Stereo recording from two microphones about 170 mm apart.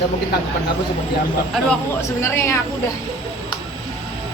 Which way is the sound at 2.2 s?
15° left (ahead or behind).